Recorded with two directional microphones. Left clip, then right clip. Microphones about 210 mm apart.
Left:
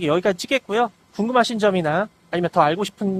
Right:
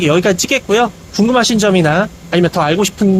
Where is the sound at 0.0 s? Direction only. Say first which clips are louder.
Right 7 dB; 25° left (ahead or behind).